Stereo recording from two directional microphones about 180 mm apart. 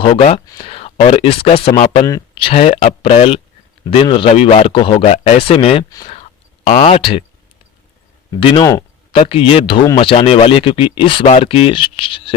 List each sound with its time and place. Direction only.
0.1 s speech: 35° left (ahead or behind)
8.3 s speech: 25° left (ahead or behind)